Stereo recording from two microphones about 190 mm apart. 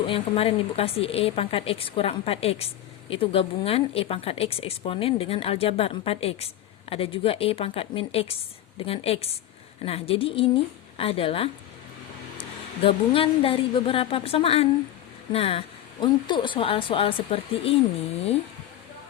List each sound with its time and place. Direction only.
0.0 s speech: 30° left (ahead or behind)
12.8 s speech: 30° left (ahead or behind)